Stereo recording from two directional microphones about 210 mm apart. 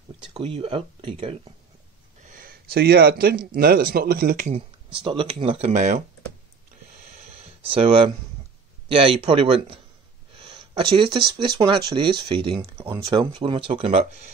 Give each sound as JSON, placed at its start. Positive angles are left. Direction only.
{"t": 0.2, "sound": "speech", "side_deg": -25}
{"t": 2.2, "sound": "speech", "side_deg": -40}
{"t": 4.9, "sound": "speech", "side_deg": -25}
{"t": 7.6, "sound": "speech", "side_deg": -25}
{"t": 10.4, "sound": "a sound", "side_deg": -25}
{"t": 11.1, "sound": "speech", "side_deg": -25}